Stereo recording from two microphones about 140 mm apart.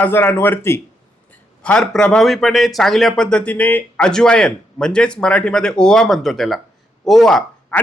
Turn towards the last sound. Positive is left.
turn(degrees=0)  # may be behind; listen again after turning